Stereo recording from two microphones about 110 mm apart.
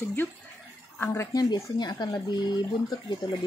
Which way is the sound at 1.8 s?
40° left (ahead or behind).